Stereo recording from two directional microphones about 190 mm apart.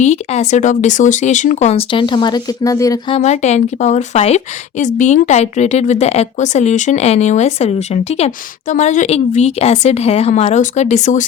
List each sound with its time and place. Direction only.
0.0 s speech: 35° left (ahead or behind); by 3.2 s 20° left (ahead or behind)
3.2 s speech: 35° left (ahead or behind)